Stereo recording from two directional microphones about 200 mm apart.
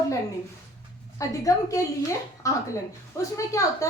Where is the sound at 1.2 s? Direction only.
15° left (ahead or behind).